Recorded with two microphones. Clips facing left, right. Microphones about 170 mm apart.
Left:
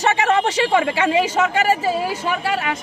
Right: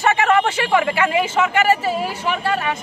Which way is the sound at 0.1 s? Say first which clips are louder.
Right 1 dB; 25° left (ahead or behind).